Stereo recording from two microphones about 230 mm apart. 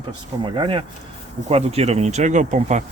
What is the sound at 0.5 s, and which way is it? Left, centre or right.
Speech, right.